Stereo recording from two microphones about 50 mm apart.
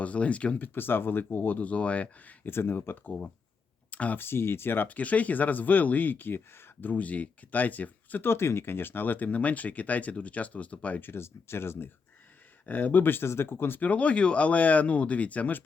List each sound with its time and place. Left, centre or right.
0.0 s speech: left
0.7 s speech: left
2.5 s speech: left
3.9 s speech: left
4.2 s speech: left
4.9 s speech: left
8.2 s speech: left
11.0 s speech: left
12.6 s speech: left
13.8 s speech: left